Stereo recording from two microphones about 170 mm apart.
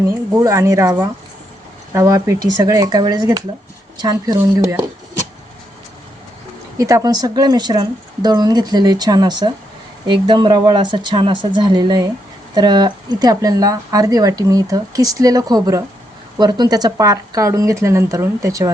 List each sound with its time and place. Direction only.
0.1 s speech: 20° right (ahead or behind)
6.7 s speech: 20° right (ahead or behind)